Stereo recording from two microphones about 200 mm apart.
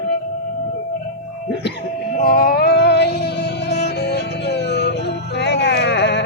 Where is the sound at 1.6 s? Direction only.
55° left (ahead or behind).